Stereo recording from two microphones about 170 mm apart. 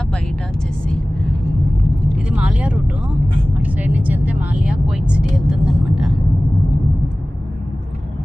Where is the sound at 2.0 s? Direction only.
5° right (ahead or behind).